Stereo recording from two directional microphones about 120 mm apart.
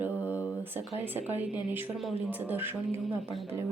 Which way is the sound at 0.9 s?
15° right (ahead or behind).